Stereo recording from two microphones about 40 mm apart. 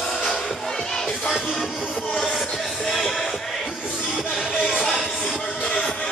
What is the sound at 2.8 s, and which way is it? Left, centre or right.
Music, centre.